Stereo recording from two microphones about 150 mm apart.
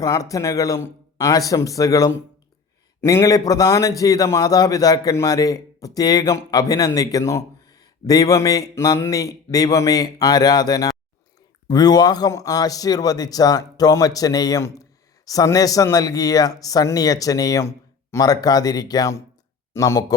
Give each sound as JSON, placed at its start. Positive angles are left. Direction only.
{"t": 0.0, "sound": "a man's voice", "side_deg": 20}